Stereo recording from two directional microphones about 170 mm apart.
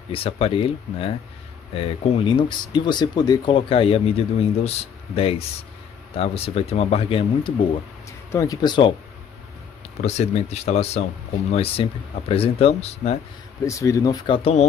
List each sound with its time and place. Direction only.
0.1 s speech: 35° left (ahead or behind)
8.3 s speech: 20° left (ahead or behind)
10.0 s speech: 40° left (ahead or behind)
13.7 s speech: 20° left (ahead or behind); by 14.7 s 35° left (ahead or behind)